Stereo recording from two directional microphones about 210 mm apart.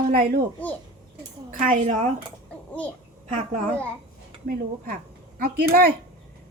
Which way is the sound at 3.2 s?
35° right (ahead or behind).